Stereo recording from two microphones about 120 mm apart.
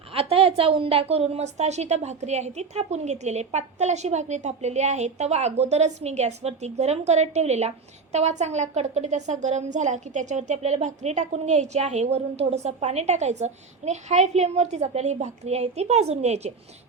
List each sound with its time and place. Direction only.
0.1 s a woman's voice: 50° right (ahead or behind)